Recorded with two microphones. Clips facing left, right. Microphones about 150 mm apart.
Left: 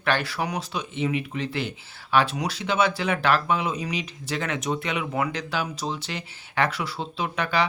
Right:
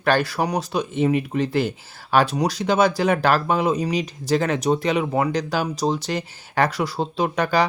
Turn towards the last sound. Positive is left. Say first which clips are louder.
# right 5 dB
turn(degrees=-40)  # may be behind; listen again after turning